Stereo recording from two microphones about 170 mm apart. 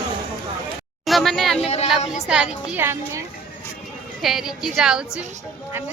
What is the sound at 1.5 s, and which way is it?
Speech, 40° left (ahead or behind).